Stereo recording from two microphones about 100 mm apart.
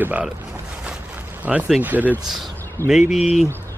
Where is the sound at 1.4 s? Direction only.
15° right (ahead or behind).